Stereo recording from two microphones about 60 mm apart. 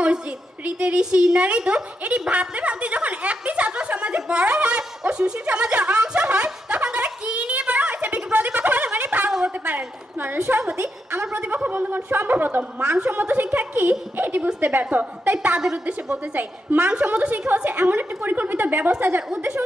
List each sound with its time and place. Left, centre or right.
0.7 s a woman's voice: centre
6.3 s a sound: centre
9.7 s a woman's voice: right
16.3 s a woman's voice: right
19.2 s a woman's voice: centre